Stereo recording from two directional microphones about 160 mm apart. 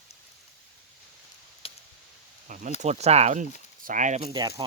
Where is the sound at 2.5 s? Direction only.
50° right (ahead or behind).